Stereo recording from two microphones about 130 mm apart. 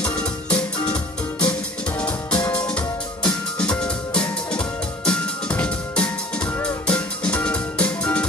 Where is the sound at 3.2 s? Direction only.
5° left (ahead or behind).